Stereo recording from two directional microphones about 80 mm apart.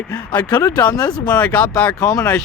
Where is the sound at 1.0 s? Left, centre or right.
Left.